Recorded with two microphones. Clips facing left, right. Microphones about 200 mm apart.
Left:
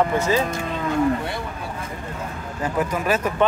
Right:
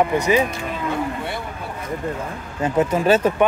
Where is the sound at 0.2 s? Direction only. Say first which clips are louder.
Right 3 dB; 15° right (ahead or behind).